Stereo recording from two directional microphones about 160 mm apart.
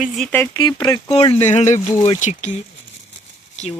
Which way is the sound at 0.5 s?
25° left (ahead or behind).